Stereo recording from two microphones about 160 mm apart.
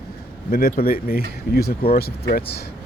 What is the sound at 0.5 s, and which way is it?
Speech, 70° left (ahead or behind).